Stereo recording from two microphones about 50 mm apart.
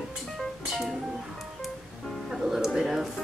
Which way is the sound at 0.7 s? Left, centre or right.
Centre.